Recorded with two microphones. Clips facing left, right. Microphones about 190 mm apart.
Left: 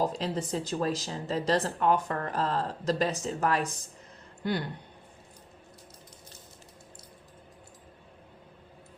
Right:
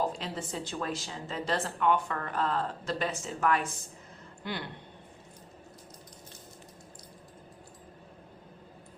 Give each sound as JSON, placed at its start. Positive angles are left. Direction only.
{"t": 0.0, "sound": "speech", "side_deg": 35}